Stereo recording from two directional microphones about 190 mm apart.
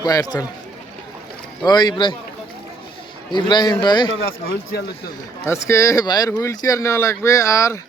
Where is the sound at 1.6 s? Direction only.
20° left (ahead or behind).